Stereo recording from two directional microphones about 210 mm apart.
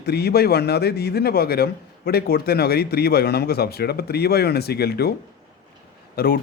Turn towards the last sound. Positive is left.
turn(degrees=45)  # may be behind; listen again after turning